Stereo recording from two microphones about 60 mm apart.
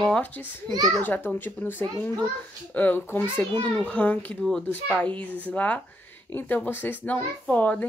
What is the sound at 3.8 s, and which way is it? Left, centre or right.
Speech, left.